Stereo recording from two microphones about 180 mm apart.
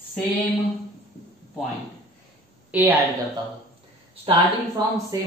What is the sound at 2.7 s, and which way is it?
Speech, 10° right (ahead or behind).